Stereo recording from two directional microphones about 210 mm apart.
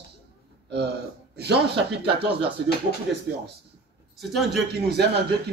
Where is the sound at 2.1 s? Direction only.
25° right (ahead or behind).